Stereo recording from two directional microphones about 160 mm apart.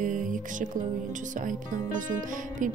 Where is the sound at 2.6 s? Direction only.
55° right (ahead or behind).